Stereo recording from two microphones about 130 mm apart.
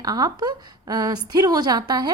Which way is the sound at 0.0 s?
30° right (ahead or behind).